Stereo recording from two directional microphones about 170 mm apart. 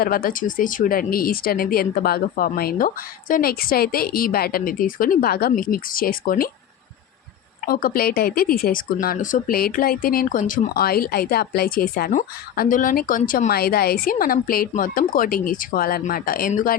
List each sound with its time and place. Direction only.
0.0 s speech: 60° left (ahead or behind)
7.6 s speech: 60° left (ahead or behind)